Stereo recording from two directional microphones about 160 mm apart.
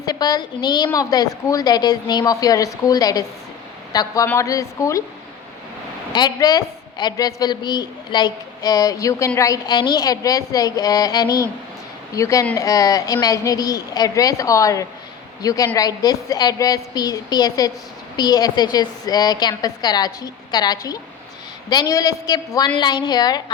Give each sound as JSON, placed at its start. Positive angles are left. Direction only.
{"t": 0.0, "sound": "a woman's voice", "side_deg": 25}
{"t": 6.1, "sound": "a woman's voice", "side_deg": 25}